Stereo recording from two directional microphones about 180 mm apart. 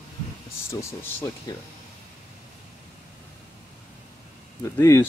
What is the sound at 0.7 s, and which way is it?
Speech, 15° left (ahead or behind).